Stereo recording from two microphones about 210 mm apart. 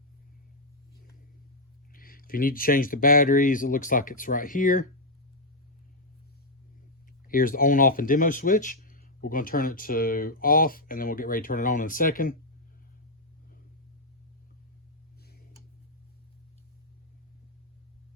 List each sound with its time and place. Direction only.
1.9 s speech: 40° left (ahead or behind)
7.3 s speech: 40° left (ahead or behind)